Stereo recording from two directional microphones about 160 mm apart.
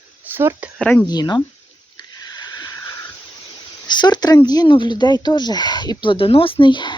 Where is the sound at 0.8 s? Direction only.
10° left (ahead or behind).